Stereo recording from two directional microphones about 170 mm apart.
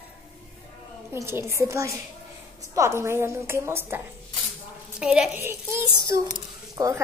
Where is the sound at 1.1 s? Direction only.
15° right (ahead or behind).